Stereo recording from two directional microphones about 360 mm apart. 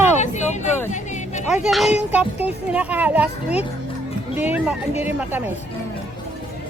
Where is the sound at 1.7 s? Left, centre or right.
Centre.